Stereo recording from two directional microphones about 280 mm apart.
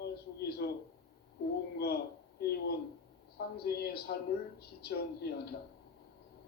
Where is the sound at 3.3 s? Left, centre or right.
Left.